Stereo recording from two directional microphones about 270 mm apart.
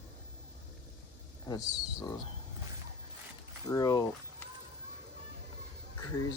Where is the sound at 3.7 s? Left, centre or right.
Centre.